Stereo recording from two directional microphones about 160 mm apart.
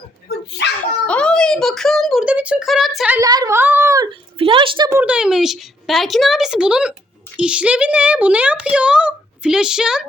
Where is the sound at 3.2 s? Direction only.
25° right (ahead or behind).